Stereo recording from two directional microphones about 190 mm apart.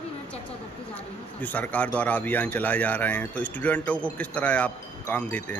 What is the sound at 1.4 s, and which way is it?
Speech, 10° left (ahead or behind).